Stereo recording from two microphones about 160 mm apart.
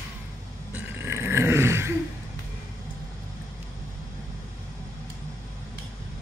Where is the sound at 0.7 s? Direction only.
15° right (ahead or behind).